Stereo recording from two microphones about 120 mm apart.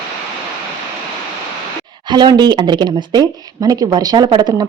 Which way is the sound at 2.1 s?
40° right (ahead or behind).